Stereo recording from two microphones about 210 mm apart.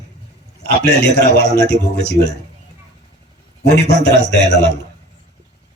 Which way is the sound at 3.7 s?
50° left (ahead or behind).